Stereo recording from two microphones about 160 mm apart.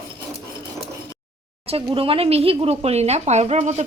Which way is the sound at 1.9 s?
35° right (ahead or behind).